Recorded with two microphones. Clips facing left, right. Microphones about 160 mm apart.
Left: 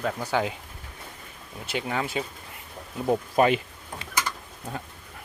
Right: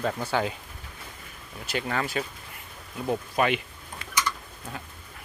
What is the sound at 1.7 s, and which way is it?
Speech, 15° left (ahead or behind).